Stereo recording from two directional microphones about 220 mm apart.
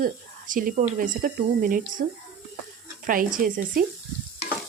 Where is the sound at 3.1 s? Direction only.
35° right (ahead or behind).